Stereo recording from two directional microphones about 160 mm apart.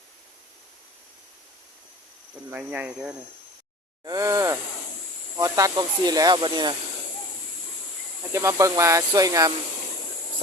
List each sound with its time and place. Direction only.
2.5 s speech: 10° right (ahead or behind)
4.0 s speech: 20° right (ahead or behind)
8.3 s speech: 20° right (ahead or behind)